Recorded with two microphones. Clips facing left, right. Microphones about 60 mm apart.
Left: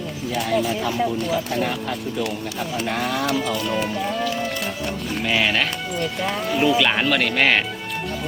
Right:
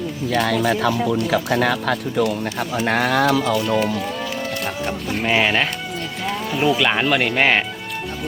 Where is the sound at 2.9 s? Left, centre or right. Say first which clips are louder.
Right 7 dB; right.